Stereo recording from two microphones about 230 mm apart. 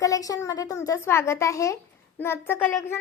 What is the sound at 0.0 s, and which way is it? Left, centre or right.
A woman's voice, centre.